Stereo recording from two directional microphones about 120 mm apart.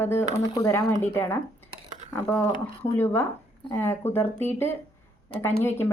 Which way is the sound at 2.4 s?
35° left (ahead or behind).